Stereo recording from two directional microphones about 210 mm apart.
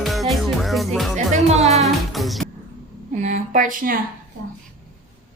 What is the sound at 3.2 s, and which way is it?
Speech, 35° right (ahead or behind).